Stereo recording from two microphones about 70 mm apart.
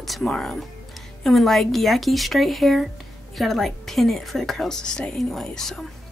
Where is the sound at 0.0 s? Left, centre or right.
Centre.